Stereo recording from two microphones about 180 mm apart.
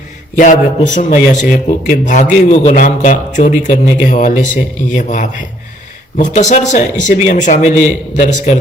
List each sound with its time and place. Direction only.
0.3 s speech: 45° left (ahead or behind)